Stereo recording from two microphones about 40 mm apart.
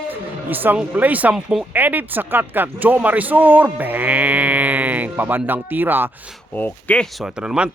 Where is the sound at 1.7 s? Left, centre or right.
Right.